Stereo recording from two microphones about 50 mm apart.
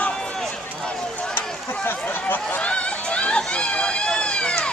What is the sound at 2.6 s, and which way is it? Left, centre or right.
Run, left.